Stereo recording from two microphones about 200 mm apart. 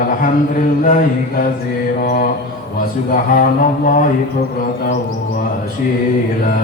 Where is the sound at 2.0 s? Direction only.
45° left (ahead or behind).